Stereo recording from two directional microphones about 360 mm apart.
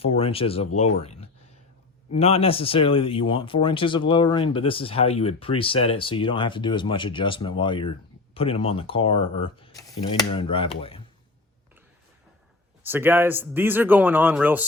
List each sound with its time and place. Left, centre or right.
0.0 s speech: centre
2.1 s speech: centre
12.8 s speech: centre